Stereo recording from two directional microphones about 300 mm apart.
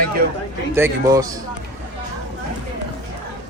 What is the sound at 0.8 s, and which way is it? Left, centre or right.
Speech, centre.